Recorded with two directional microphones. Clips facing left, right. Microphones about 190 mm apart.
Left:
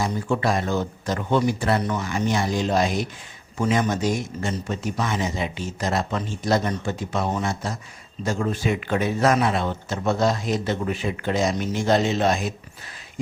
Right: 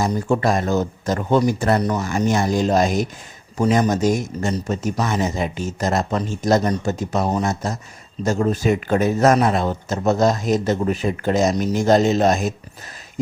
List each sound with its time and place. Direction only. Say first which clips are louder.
0.0 s a man's voice: right 4 dB; 45° right (ahead or behind)